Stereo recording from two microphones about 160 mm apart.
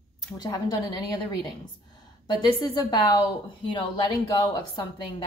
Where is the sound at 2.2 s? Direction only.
25° left (ahead or behind).